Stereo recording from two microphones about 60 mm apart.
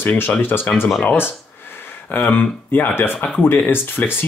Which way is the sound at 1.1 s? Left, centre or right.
Left.